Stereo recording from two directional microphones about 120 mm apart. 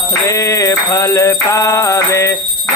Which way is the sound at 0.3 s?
25° left (ahead or behind).